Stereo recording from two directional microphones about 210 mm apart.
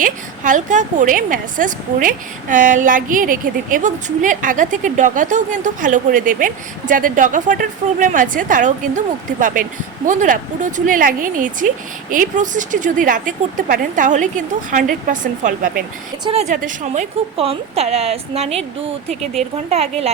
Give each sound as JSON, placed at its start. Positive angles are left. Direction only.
{"t": 0.0, "sound": "a woman's voice", "side_deg": -35}
{"t": 19.0, "sound": "speech", "side_deg": 0}
{"t": 19.7, "sound": "speech", "side_deg": -30}